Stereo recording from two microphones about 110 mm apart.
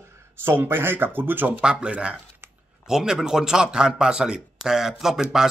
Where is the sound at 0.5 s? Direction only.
20° right (ahead or behind).